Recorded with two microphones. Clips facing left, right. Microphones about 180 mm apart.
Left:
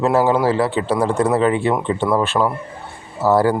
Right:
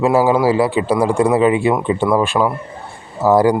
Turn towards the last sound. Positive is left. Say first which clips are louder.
# right 3 dB
turn(degrees=-15)  # may be behind; listen again after turning